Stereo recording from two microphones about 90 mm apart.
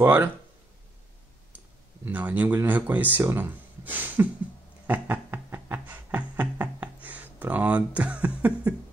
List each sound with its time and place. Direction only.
0.0 s speech: 25° right (ahead or behind)
2.0 s speech: 20° right (ahead or behind)
4.8 s music: 20° right (ahead or behind)